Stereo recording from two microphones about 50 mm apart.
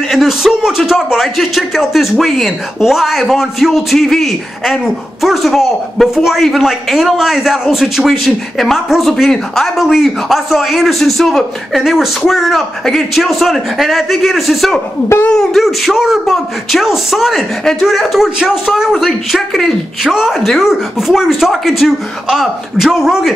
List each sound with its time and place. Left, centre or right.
0.3 s a man's voice: centre